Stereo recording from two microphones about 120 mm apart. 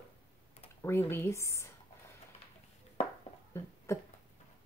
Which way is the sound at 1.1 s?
20° left (ahead or behind).